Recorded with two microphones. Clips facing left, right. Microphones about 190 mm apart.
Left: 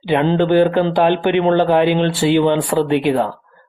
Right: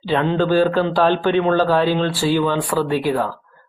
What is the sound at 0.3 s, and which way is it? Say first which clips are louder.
Speech: left 2 dB; 20° left (ahead or behind).